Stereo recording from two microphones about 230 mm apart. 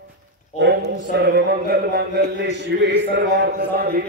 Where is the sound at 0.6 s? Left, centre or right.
Right.